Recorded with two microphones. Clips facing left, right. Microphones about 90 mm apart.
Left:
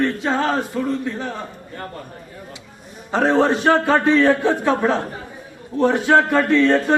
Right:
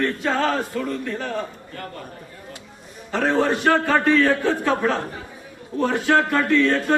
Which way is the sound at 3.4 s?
20° left (ahead or behind).